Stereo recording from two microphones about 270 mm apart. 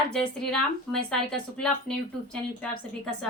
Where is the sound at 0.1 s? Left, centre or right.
Centre.